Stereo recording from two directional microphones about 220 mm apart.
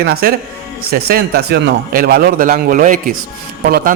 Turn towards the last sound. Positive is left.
turn(degrees=-45)  # may be behind; listen again after turning